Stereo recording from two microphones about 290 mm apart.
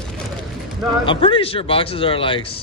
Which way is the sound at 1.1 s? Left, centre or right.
Centre.